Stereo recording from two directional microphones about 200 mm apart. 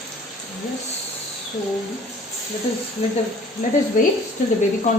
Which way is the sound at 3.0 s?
35° left (ahead or behind).